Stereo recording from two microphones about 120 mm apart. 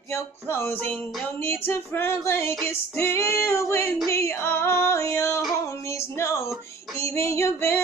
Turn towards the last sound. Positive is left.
turn(degrees=20)  # may be behind; listen again after turning